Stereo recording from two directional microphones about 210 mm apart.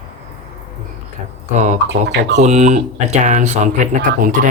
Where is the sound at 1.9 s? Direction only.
55° right (ahead or behind).